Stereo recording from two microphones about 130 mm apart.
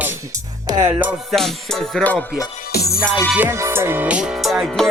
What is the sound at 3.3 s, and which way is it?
Music, 15° right (ahead or behind).